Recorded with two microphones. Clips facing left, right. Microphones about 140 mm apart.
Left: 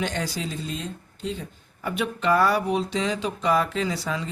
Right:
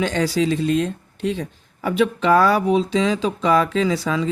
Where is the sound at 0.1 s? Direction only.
90° right.